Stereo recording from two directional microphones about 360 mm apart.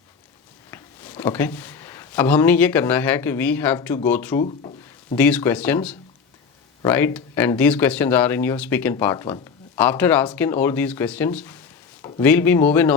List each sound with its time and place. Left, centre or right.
0.7 s speech: centre
4.4 s a sound: centre
5.1 s speech: centre